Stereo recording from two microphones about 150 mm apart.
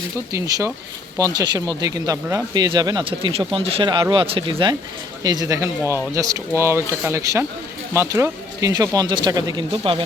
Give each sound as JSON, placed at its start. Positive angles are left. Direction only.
{"t": 0.3, "sound": "speech", "side_deg": -20}